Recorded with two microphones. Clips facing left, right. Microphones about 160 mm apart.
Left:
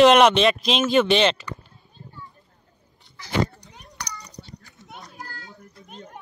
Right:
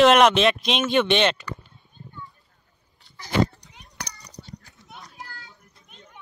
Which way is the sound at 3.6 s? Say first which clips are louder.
Left 4 dB; 45° left (ahead or behind).